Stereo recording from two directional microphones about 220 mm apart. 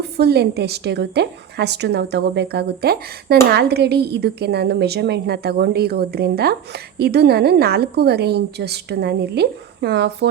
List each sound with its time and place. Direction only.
0.0 s a woman's voice: 45° right (ahead or behind)